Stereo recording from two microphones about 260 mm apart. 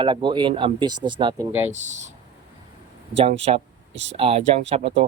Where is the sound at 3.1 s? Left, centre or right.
Right.